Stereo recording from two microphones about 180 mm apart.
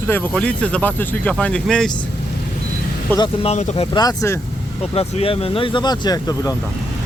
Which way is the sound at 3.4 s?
35° left (ahead or behind).